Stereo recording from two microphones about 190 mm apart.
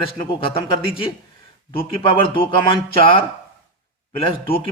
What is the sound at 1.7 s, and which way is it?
A man's voice, 30° left (ahead or behind).